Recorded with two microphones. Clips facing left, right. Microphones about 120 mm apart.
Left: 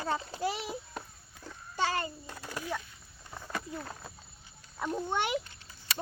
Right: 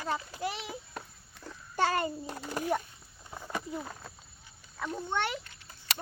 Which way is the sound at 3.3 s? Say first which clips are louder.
Right 2 dB; 10° right (ahead or behind).